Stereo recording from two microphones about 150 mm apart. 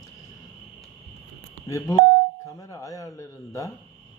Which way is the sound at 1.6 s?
20° left (ahead or behind).